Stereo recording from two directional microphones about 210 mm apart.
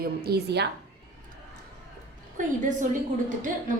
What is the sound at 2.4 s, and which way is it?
Speech, 40° right (ahead or behind).